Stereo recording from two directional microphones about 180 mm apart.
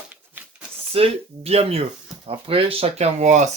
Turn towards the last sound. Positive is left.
turn(degrees=-40)  # may be behind; listen again after turning